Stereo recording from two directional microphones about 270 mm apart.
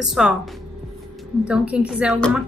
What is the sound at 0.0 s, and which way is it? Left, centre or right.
Speech, centre.